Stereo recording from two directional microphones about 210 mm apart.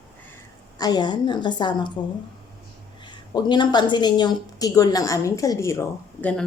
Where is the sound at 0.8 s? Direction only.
20° left (ahead or behind).